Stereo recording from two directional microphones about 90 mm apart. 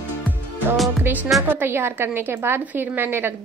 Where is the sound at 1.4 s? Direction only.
25° right (ahead or behind).